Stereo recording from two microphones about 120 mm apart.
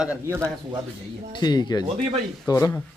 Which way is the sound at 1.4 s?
35° left (ahead or behind).